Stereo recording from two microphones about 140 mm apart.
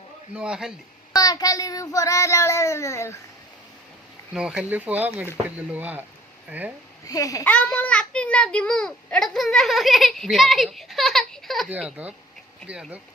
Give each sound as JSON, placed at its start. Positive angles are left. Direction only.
{"t": 0.3, "sound": "speech", "side_deg": -5}
{"t": 1.1, "sound": "child singing", "side_deg": 25}
{"t": 4.4, "sound": "speech", "side_deg": -5}
{"t": 7.0, "sound": "child singing", "side_deg": 25}
{"t": 7.4, "sound": "a child's voice", "side_deg": 10}